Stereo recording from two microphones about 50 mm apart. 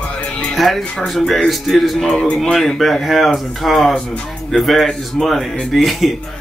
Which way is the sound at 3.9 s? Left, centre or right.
Centre.